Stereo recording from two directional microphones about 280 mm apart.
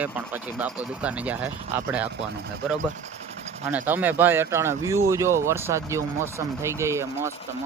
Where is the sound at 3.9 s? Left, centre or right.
Centre.